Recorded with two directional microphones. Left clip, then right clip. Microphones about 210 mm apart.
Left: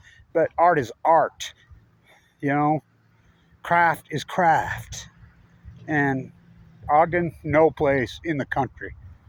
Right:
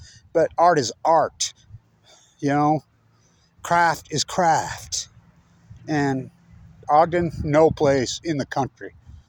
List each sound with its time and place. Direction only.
0.3 s speech: 20° right (ahead or behind)
2.4 s speech: 25° right (ahead or behind)
5.8 s speech: 15° right (ahead or behind)
6.8 s speech: 25° right (ahead or behind)